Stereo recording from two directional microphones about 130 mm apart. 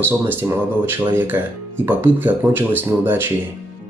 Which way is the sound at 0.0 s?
15° right (ahead or behind).